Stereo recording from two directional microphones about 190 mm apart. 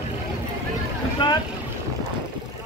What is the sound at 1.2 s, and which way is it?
Boat, 25° left (ahead or behind).